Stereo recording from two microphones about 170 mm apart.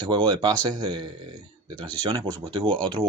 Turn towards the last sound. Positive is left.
turn(degrees=-30)  # may be behind; listen again after turning